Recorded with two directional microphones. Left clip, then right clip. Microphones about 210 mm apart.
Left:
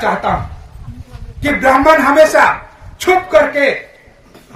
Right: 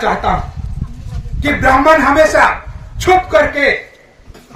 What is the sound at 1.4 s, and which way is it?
A man's voice, centre (ahead or behind).